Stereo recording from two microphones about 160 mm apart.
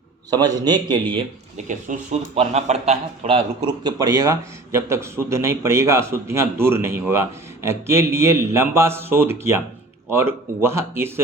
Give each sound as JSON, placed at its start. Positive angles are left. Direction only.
{"t": 0.3, "sound": "a man's voice", "side_deg": -25}
{"t": 1.5, "sound": "speech", "side_deg": -50}
{"t": 2.3, "sound": "a man's voice", "side_deg": -40}